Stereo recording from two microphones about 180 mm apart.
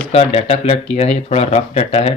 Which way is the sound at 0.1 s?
35° left (ahead or behind).